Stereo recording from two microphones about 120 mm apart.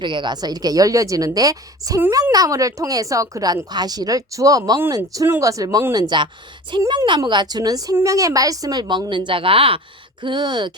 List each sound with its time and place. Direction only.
0.0 s a woman's voice: 40° right (ahead or behind)
2.0 s a woman's voice: 20° right (ahead or behind); by 10.7 s 40° right (ahead or behind)